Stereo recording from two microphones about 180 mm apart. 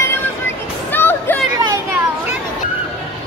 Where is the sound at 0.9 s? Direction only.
10° left (ahead or behind).